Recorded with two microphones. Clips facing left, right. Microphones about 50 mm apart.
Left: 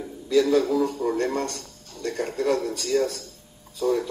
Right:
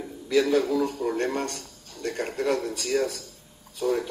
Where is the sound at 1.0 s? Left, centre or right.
Right.